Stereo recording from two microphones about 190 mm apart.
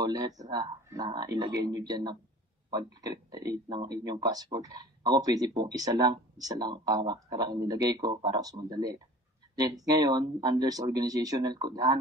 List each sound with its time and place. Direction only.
0.0 s speech: 20° right (ahead or behind)